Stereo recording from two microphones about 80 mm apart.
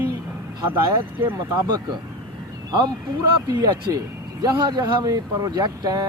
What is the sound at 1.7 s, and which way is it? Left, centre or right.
Speech, right.